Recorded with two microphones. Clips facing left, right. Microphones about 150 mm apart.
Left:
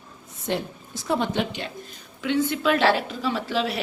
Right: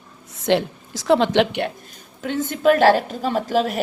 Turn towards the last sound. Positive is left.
turn(degrees=-45)  # may be behind; listen again after turning